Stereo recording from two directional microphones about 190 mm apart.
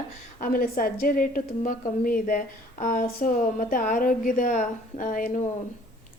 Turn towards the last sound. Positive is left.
turn(degrees=45)  # may be behind; listen again after turning